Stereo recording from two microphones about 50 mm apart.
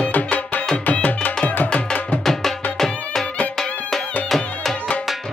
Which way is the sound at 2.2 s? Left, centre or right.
Centre.